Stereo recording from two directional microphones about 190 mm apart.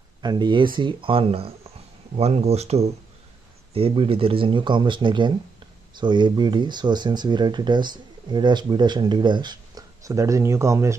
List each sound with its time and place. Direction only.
0.2 s speech: 20° right (ahead or behind)